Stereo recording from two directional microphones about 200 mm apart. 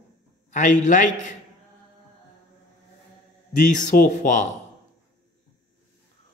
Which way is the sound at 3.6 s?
40° left (ahead or behind).